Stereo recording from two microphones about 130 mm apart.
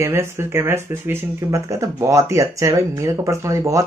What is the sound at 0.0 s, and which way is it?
Speech, 20° right (ahead or behind).